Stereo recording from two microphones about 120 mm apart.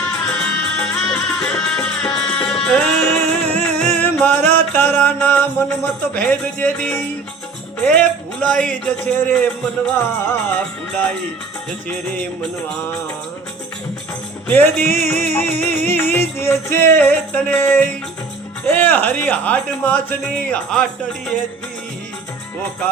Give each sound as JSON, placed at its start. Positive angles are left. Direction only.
{"t": 0.3, "sound": "music", "side_deg": 5}
{"t": 7.9, "sound": "a man's voice", "side_deg": 10}
{"t": 12.1, "sound": "speech", "side_deg": 5}
{"t": 14.4, "sound": "music", "side_deg": 15}
{"t": 14.8, "sound": "music", "side_deg": -70}
{"t": 15.1, "sound": "speech", "side_deg": 20}
{"t": 15.9, "sound": "music", "side_deg": 20}
{"t": 17.0, "sound": "speech", "side_deg": 10}